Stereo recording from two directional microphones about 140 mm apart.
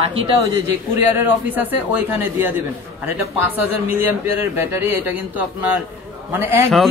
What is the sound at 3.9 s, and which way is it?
Speech, 15° right (ahead or behind).